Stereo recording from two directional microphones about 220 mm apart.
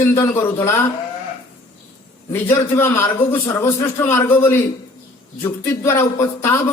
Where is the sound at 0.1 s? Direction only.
10° left (ahead or behind).